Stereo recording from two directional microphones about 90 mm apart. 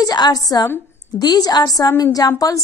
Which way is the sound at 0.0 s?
50° left (ahead or behind).